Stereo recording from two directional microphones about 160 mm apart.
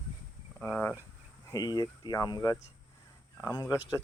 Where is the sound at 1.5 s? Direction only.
25° left (ahead or behind).